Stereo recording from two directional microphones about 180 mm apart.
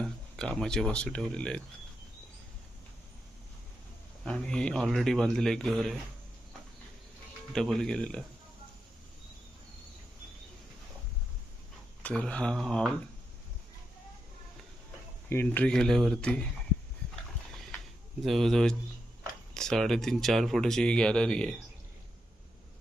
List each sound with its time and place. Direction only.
0.0 s speech: 5° left (ahead or behind)
4.3 s speech: 5° left (ahead or behind)
7.5 s speech: centre (ahead or behind)
12.0 s speech: 5° left (ahead or behind)
15.3 s speech: 10° left (ahead or behind)
18.2 s speech: centre (ahead or behind)